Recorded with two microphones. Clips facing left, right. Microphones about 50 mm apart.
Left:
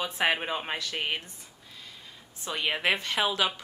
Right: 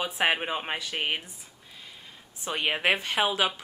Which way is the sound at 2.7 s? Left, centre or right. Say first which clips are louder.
Right 2 dB; centre.